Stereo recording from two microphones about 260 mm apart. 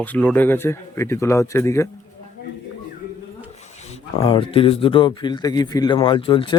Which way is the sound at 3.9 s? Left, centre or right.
Left.